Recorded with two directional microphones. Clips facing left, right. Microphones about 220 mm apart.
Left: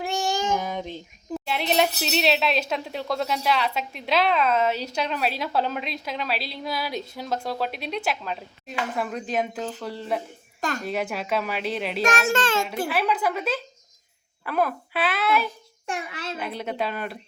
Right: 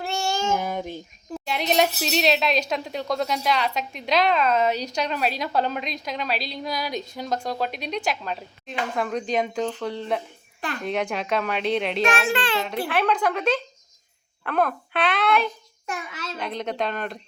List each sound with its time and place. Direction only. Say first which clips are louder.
0.0 s child singing: even; 15° left (ahead or behind)
0.5 s speech: right 1 dB; 10° right (ahead or behind)
1.3 s speech: even; centre (ahead or behind)
10.6 s a child's voice: left 2 dB; 45° left (ahead or behind)
10.8 s speech: right 5 dB; 5° left (ahead or behind)
12.0 s a child's voice: even; 45° left (ahead or behind)
12.9 s speech: right 3 dB; 5° left (ahead or behind)
15.9 s a child's voice: left 1 dB; 30° left (ahead or behind)
16.4 s speech: right 2 dB; 5° left (ahead or behind)